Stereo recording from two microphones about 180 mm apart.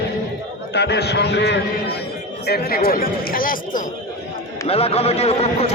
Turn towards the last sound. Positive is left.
turn(degrees=35)  # may be behind; listen again after turning